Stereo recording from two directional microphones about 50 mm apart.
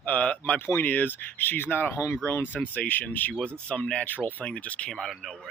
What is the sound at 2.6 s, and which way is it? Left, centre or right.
Speech, left.